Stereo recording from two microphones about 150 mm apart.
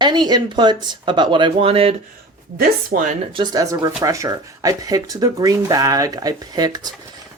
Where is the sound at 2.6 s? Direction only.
70° right (ahead or behind).